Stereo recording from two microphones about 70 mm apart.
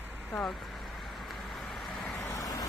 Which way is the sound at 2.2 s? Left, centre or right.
Left.